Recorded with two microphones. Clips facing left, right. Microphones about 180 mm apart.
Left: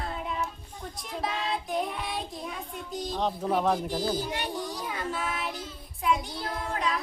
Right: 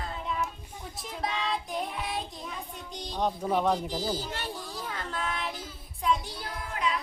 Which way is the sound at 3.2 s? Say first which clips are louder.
Right 1 dB; centre (ahead or behind).